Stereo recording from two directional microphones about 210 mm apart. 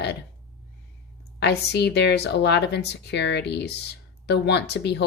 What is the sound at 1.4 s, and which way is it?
Speech, 50° left (ahead or behind).